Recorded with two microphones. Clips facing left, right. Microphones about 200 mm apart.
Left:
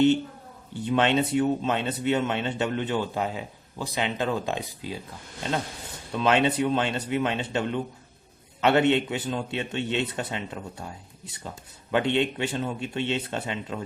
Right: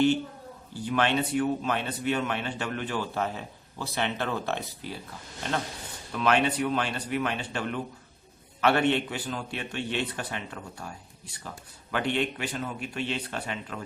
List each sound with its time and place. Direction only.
0.7 s a man's voice: 25° left (ahead or behind)
6.1 s a man's voice: 25° left (ahead or behind)